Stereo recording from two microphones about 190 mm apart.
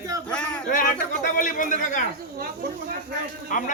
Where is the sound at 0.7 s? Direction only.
45° left (ahead or behind).